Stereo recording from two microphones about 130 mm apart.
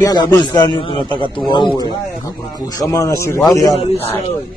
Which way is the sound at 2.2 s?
25° left (ahead or behind).